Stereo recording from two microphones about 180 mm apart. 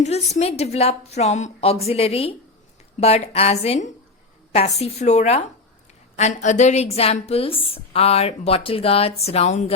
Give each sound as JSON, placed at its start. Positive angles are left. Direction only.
{"t": 0.0, "sound": "a woman's voice", "side_deg": 35}